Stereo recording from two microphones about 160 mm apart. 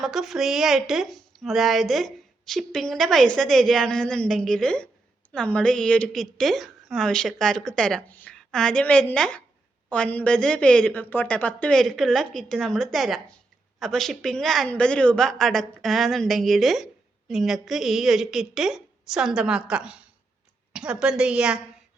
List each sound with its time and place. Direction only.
0.0 s a woman's voice: centre (ahead or behind)